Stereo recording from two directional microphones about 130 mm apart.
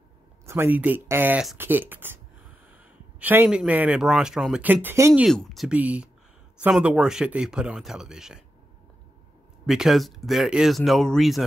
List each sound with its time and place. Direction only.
0.5 s speech: 15° right (ahead or behind)
3.2 s speech: 10° right (ahead or behind)
4.8 s speech: 20° right (ahead or behind)
5.3 s speech: 5° left (ahead or behind)
5.7 s speech: 10° right (ahead or behind)
9.7 s speech: 5° right (ahead or behind)